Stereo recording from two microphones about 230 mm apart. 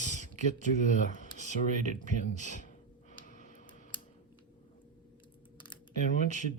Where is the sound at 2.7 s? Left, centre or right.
Left.